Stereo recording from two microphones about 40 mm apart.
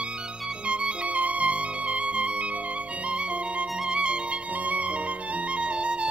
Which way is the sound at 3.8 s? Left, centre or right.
Right.